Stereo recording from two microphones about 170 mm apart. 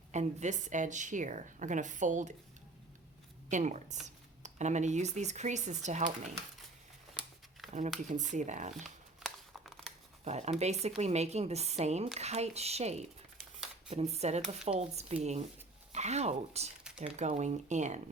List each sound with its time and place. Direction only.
0.1 s speech: 45° right (ahead or behind)
3.5 s speech: 45° right (ahead or behind)
7.6 s shuffling cards: centre (ahead or behind)
8.1 s speech: 45° right (ahead or behind)
9.2 s crumpling: centre (ahead or behind)
10.2 s a woman's voice: 40° right (ahead or behind)